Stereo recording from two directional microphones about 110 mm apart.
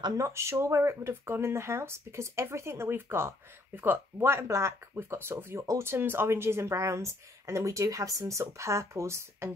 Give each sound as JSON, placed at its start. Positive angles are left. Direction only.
{"t": 0.2, "sound": "speech", "side_deg": -25}